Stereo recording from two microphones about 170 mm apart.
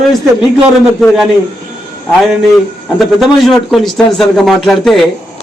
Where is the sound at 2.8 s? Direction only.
Centre (ahead or behind).